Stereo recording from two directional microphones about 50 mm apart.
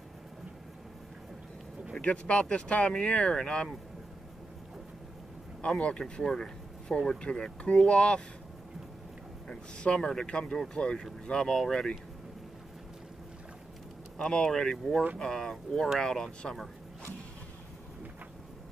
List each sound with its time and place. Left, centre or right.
2.0 s speech: left
5.8 s speech: centre
9.5 s speech: centre
14.1 s speech: centre